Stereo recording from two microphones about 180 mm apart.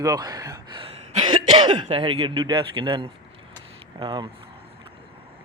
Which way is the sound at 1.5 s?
25° right (ahead or behind).